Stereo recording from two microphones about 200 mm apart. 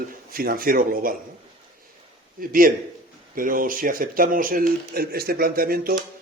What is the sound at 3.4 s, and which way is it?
Speech, 45° right (ahead or behind).